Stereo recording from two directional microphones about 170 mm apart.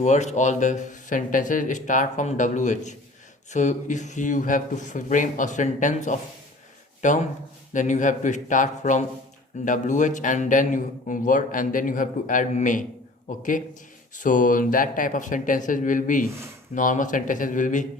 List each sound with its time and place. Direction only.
0.0 s a man's voice: 45° left (ahead or behind)